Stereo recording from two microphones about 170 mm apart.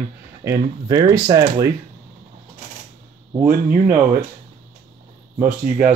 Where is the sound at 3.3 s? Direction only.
10° right (ahead or behind).